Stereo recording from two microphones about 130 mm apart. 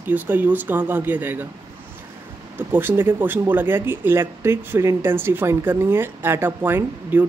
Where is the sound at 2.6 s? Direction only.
15° right (ahead or behind).